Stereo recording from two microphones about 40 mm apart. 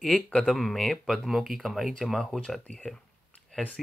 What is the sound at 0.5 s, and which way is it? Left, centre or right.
Speech, centre.